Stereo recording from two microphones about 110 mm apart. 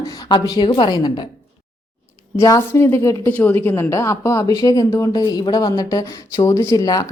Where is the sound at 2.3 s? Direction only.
30° left (ahead or behind).